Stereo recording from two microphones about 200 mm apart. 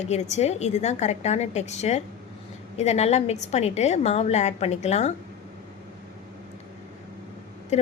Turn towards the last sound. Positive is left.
turn(degrees=35)  # may be behind; listen again after turning